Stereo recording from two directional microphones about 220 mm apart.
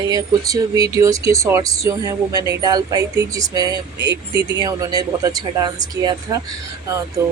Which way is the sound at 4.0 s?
50° right (ahead or behind).